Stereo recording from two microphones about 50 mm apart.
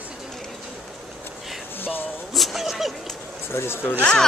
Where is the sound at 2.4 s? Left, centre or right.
Centre.